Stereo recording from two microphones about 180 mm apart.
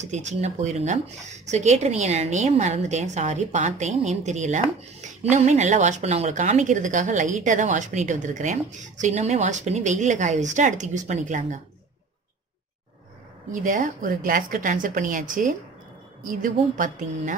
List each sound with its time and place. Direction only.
0.0 s speech: 40° right (ahead or behind)
13.5 s speech: 45° right (ahead or behind)